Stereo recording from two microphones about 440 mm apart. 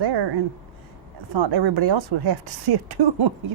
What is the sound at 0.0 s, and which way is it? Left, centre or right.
Speech, right.